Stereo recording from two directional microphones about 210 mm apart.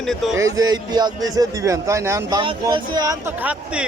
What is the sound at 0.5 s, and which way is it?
A man's voice, 20° right (ahead or behind).